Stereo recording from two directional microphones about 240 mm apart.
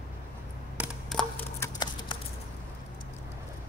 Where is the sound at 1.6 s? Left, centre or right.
Centre.